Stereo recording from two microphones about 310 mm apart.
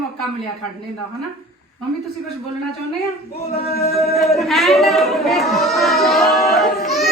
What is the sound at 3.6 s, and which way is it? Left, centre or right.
Music, left.